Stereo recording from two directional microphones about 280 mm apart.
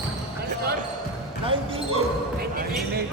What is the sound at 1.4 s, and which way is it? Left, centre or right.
Speech, centre.